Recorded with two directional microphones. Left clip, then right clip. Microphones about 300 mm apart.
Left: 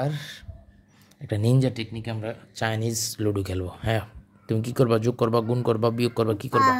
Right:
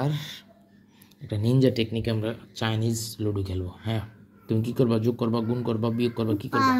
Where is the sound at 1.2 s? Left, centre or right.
Left.